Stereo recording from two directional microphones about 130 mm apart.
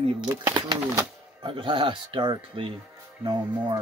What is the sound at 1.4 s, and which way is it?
Speech, 40° right (ahead or behind).